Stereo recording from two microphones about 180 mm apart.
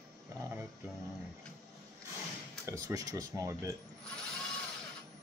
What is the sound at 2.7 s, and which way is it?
Speech, 15° right (ahead or behind).